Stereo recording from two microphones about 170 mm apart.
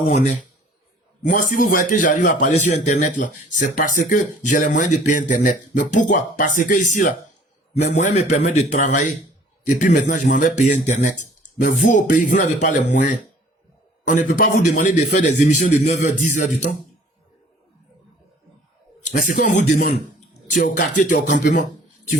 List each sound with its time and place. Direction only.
1.2 s a man's voice: 50° left (ahead or behind)
19.0 s a man's voice: 45° left (ahead or behind)